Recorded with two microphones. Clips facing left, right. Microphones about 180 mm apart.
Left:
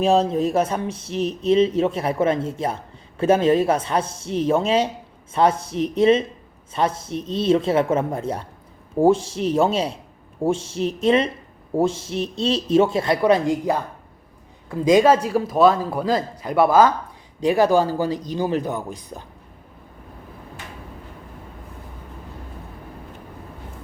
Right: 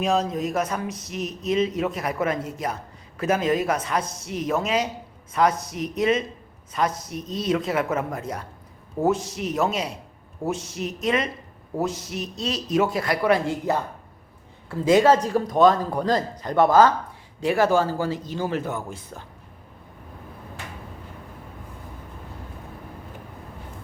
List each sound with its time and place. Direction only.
0.0 s a man's voice: 30° left (ahead or behind)